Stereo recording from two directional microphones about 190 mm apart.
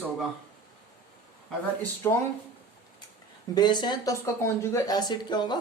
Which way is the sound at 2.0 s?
15° left (ahead or behind).